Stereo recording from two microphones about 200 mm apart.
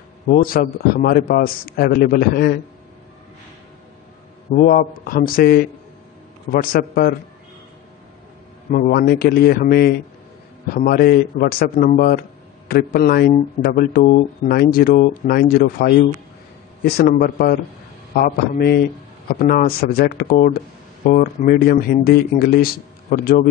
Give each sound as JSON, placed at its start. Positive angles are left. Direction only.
{"t": 0.3, "sound": "speech", "side_deg": 45}
{"t": 4.5, "sound": "speech", "side_deg": 45}
{"t": 8.7, "sound": "speech", "side_deg": 45}